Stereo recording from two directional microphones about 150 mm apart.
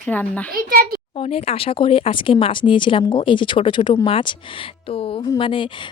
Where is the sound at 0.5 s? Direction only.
75° right (ahead or behind).